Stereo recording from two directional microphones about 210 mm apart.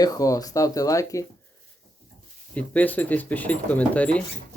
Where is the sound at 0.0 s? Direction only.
15° left (ahead or behind).